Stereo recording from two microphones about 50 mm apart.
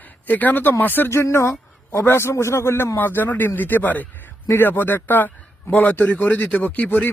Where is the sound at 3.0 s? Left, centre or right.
Left.